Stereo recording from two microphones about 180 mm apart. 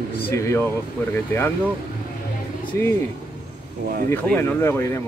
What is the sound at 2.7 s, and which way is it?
Speech, 10° left (ahead or behind).